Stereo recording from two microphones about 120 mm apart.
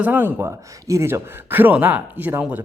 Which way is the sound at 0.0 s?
15° right (ahead or behind).